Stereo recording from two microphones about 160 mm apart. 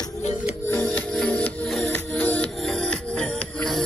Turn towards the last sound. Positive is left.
turn(degrees=5)  # may be behind; listen again after turning